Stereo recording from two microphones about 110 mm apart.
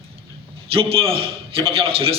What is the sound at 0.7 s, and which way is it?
A man's voice, 60° right (ahead or behind).